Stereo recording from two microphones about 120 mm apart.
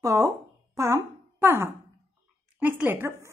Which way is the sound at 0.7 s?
25° right (ahead or behind).